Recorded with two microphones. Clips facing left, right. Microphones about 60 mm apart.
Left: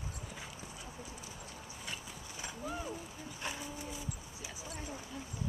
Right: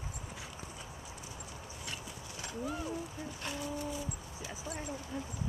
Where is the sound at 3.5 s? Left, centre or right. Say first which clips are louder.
Right 4 dB; centre.